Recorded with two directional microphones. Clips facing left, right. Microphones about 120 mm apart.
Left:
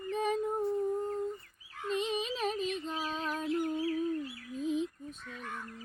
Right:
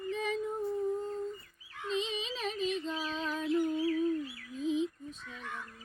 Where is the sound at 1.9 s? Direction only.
50° left (ahead or behind).